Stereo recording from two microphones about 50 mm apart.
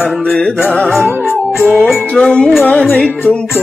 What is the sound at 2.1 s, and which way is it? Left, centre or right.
Music, centre.